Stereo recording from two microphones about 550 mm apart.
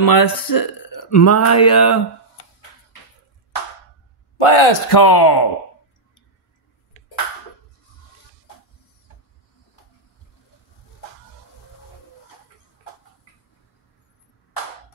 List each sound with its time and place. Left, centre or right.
0.0 s speech: left
4.4 s speech: left